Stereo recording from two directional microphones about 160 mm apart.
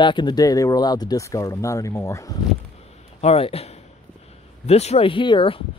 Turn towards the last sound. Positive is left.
turn(degrees=30)  # may be behind; listen again after turning